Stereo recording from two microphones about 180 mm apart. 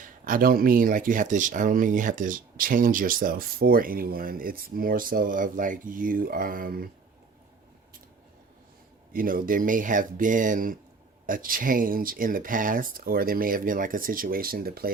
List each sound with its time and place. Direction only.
0.0 s speech: 50° right (ahead or behind)
9.1 s speech: 50° right (ahead or behind)